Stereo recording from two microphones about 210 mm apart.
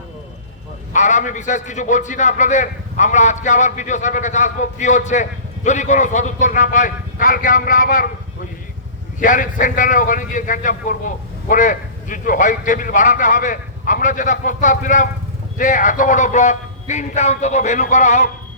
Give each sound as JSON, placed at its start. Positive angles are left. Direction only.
{"t": 0.9, "sound": "a man's voice", "side_deg": 35}
{"t": 9.2, "sound": "a man's voice", "side_deg": 40}